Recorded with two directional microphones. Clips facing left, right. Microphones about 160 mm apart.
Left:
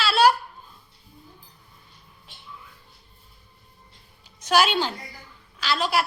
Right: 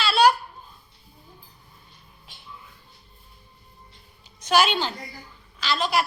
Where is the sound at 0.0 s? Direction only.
5° left (ahead or behind).